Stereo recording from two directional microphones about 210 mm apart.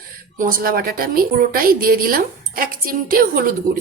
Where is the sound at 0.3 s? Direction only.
45° right (ahead or behind).